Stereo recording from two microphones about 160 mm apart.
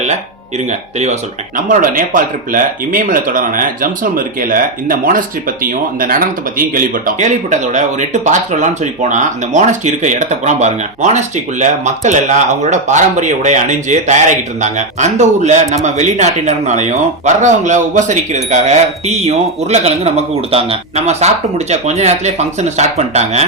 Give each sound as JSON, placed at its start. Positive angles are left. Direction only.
{"t": 0.7, "sound": "speech", "side_deg": -45}